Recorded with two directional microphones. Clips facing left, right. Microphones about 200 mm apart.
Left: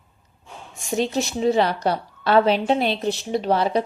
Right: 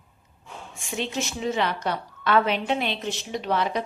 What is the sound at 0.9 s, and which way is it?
A woman's voice, 40° left (ahead or behind).